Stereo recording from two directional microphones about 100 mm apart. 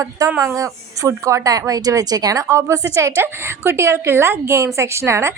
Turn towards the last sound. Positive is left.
turn(degrees=-30)  # may be behind; listen again after turning